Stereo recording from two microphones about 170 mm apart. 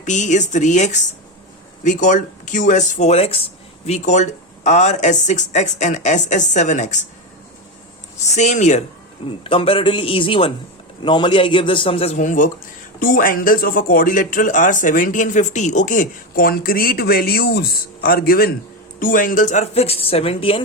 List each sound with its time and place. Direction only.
0.0 s speech: 45° left (ahead or behind)
8.2 s a woman's voice: 45° left (ahead or behind)
12.1 s a woman's voice: 50° left (ahead or behind); by 20.6 s 35° left (ahead or behind)